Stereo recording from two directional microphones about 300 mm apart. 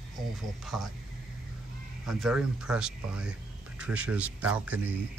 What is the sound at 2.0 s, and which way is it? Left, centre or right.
A man's voice, centre.